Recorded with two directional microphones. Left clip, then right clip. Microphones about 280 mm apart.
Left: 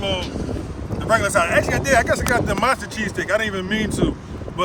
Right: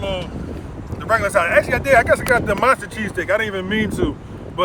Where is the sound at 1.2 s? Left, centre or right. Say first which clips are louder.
Right 2 dB; centre.